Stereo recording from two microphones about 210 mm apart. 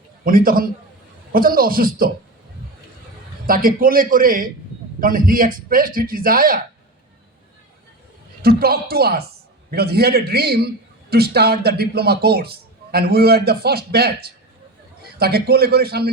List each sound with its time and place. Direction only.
0.3 s a man's voice: 45° right (ahead or behind)
3.4 s a man's voice: 40° right (ahead or behind)
8.4 s a man's voice: 45° right (ahead or behind)